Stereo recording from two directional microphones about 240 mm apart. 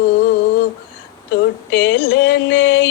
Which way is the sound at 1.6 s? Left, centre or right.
Left.